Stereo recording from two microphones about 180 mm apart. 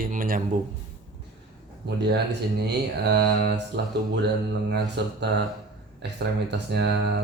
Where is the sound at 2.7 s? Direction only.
65° right (ahead or behind).